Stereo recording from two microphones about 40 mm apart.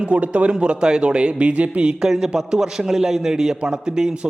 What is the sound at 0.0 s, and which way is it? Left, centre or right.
A man's voice, right.